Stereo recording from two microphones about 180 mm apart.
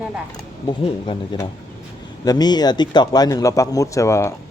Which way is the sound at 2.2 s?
20° left (ahead or behind).